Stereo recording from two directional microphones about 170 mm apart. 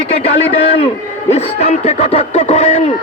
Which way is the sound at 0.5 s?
35° left (ahead or behind).